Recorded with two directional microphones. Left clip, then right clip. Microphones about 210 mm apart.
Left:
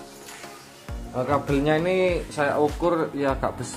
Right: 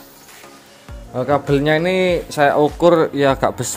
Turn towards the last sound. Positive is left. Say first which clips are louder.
# right 9 dB
turn(degrees=-50)  # may be behind; listen again after turning